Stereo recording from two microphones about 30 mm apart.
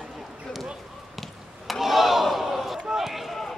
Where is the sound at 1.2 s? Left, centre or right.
Centre.